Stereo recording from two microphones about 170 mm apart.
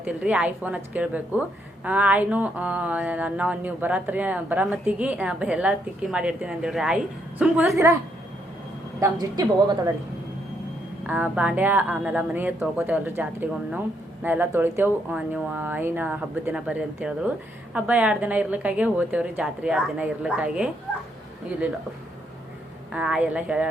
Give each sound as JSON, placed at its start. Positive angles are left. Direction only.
{"t": 0.0, "sound": "a woman's voice", "side_deg": -10}
{"t": 7.7, "sound": "a woman's voice", "side_deg": -15}
{"t": 9.3, "sound": "speech", "side_deg": -20}
{"t": 11.0, "sound": "a woman's voice", "side_deg": -10}
{"t": 22.9, "sound": "a woman's voice", "side_deg": -5}